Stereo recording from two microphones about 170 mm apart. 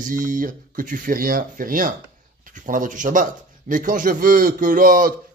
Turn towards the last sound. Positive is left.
turn(degrees=-55)  # may be behind; listen again after turning